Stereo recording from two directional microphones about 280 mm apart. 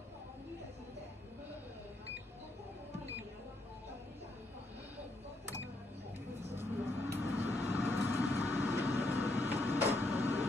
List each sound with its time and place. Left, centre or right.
6.5 s vehicle: centre